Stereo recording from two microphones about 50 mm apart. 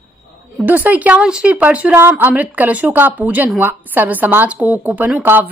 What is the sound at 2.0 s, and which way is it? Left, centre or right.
A woman's voice, right.